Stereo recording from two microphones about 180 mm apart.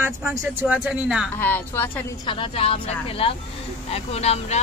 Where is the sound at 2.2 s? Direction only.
30° left (ahead or behind).